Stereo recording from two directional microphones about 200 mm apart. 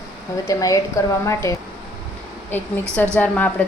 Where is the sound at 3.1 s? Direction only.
10° left (ahead or behind).